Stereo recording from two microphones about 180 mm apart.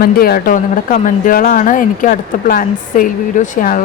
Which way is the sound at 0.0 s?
55° left (ahead or behind).